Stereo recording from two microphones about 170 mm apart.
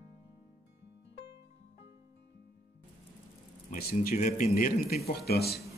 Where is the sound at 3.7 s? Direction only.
60° left (ahead or behind).